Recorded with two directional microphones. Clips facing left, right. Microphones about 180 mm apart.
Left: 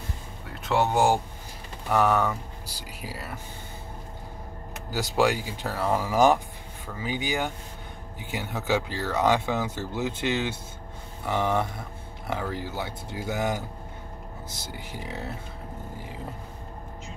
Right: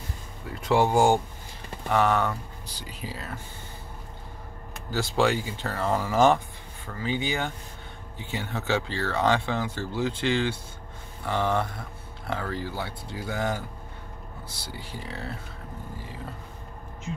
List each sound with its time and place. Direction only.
0.9 s speech: 5° left (ahead or behind)
4.9 s speech: 10° left (ahead or behind)
14.7 s speech: 15° left (ahead or behind)